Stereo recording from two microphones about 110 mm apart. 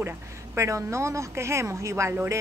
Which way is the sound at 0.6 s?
25° right (ahead or behind).